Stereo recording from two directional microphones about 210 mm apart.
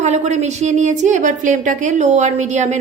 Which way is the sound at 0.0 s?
35° right (ahead or behind).